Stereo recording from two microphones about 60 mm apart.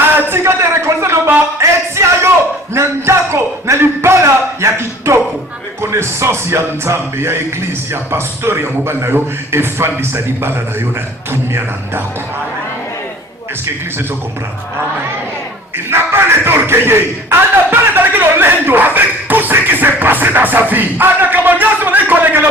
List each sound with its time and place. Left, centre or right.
0.2 s a sound: right
2.7 s a man's voice: right
15.9 s speech: right